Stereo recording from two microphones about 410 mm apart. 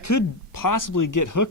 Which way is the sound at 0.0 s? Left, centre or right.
Left.